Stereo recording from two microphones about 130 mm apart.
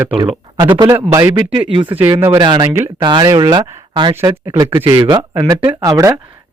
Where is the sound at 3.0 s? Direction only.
35° right (ahead or behind).